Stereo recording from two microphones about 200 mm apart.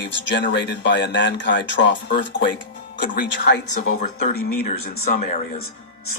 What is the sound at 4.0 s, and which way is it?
Speech, 45° left (ahead or behind).